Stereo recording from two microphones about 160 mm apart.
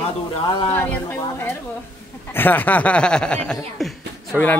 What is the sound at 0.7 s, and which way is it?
Speech, 15° left (ahead or behind).